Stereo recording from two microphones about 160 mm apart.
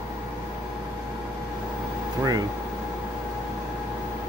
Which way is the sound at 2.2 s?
25° right (ahead or behind).